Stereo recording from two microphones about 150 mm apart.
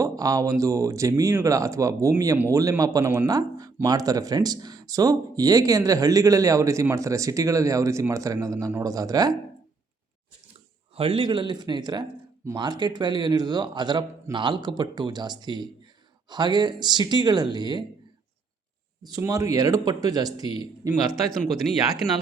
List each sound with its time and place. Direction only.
0.0 s speech: 25° right (ahead or behind)
10.9 s speech: 35° right (ahead or behind)
19.1 s speech: 20° right (ahead or behind)
21.1 s speech: 5° left (ahead or behind)